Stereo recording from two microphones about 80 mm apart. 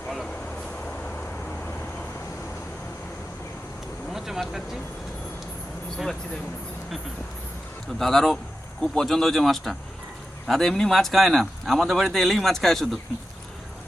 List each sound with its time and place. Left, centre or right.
0.9 s vehicle: centre
4.1 s vehicle: centre
7.9 s speech: centre